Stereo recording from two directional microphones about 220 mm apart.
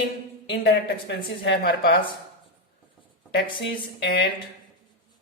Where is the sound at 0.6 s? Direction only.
45° left (ahead or behind).